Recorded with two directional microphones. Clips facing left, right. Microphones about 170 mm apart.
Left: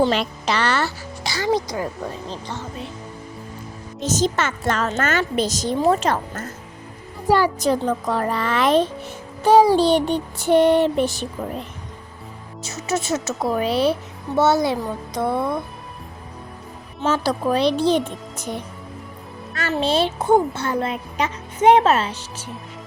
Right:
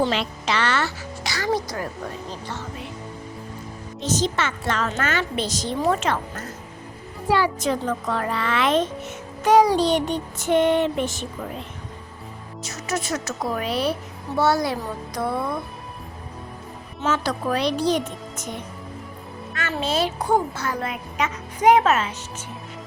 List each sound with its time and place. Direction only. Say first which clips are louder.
0.1 s speech: left 3 dB; 40° left (ahead or behind); by 1.9 s 20° left (ahead or behind)
4.0 s a woman's voice: left 3 dB; 45° left (ahead or behind)
5.8 s music: left 3 dB; 35° left (ahead or behind)
12.6 s speech: left 4 dB; 25° left (ahead or behind)
15.4 s speech: left 4 dB; centre (ahead or behind)
17.0 s music: left 3 dB; 35° left (ahead or behind)
17.7 s speech: left 3 dB; 30° left (ahead or behind)
18.3 s music: left 5 dB; 35° left (ahead or behind)
19.5 s speech: left 4 dB; 35° left (ahead or behind)